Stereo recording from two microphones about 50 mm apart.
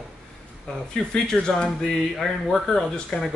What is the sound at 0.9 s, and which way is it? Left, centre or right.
Speech, centre.